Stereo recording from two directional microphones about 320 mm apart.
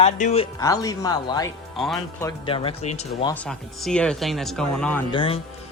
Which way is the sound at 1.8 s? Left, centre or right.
Centre.